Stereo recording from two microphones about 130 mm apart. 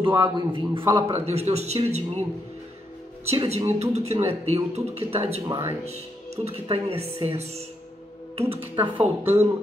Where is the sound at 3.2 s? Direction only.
50° right (ahead or behind).